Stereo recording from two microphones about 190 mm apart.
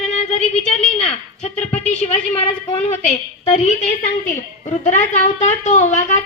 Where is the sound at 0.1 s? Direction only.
35° left (ahead or behind).